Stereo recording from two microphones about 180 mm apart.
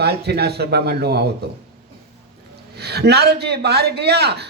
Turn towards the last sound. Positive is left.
turn(degrees=-65)  # may be behind; listen again after turning